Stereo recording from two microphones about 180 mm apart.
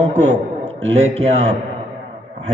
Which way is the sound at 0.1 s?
40° right (ahead or behind).